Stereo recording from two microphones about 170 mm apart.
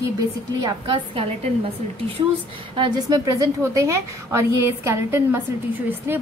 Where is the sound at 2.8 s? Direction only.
20° right (ahead or behind).